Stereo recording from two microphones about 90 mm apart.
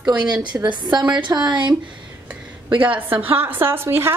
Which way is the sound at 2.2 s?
15° right (ahead or behind).